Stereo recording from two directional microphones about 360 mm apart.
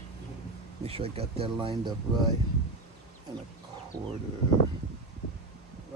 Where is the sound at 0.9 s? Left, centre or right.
Centre.